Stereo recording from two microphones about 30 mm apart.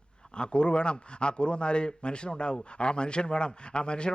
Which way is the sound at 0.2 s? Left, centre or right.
Left.